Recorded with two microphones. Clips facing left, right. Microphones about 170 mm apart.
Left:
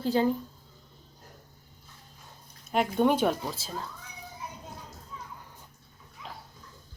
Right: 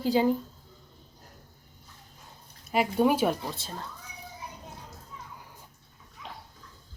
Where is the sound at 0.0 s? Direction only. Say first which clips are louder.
Right 1 dB; 10° right (ahead or behind).